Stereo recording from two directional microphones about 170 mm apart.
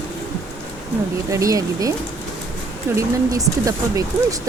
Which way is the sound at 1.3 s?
20° right (ahead or behind).